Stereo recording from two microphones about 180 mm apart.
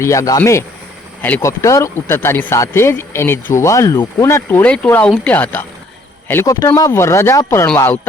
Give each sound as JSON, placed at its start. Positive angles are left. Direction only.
{"t": 0.0, "sound": "speech", "side_deg": 15}